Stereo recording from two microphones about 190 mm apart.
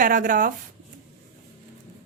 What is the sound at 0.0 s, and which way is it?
Speech, 45° right (ahead or behind).